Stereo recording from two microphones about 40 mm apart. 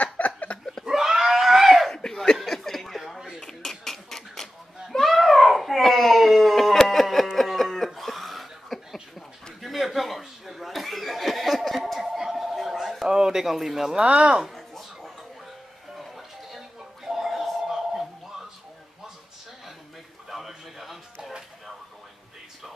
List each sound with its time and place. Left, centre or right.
0.0 s a sound: left
0.8 s screaming: centre
1.9 s chuckle: centre
3.3 s a sound: centre
4.9 s baby cry: centre
7.3 s cough: centre
9.6 s chuckle: centre
12.5 s a sound: centre
14.0 s speech: right
14.5 s a sound: centre
16.0 s music: centre
20.2 s music: centre